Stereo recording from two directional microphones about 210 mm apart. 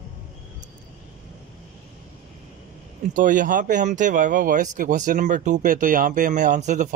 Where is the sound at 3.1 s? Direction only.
40° right (ahead or behind).